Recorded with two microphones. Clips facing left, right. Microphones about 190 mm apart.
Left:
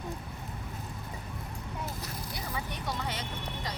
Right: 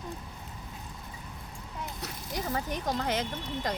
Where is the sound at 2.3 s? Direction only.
45° right (ahead or behind).